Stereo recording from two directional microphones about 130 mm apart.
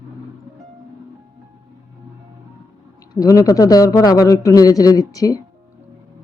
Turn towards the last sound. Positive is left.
turn(degrees=25)  # may be behind; listen again after turning